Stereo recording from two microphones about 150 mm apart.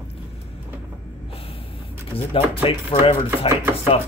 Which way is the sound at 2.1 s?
35° left (ahead or behind).